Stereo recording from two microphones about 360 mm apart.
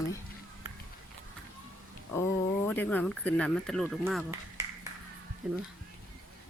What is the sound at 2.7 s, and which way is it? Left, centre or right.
Speech, centre.